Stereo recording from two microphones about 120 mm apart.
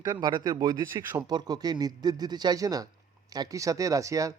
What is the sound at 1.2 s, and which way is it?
A man's voice, 35° right (ahead or behind).